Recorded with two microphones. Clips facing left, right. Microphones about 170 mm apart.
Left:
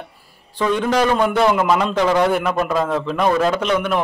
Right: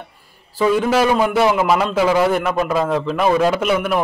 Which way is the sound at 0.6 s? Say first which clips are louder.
Right 2 dB; 5° right (ahead or behind).